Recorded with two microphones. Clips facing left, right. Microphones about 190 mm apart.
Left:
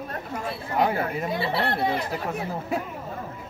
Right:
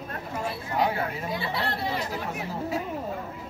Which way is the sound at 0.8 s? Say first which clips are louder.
Left 3 dB; 55° left (ahead or behind).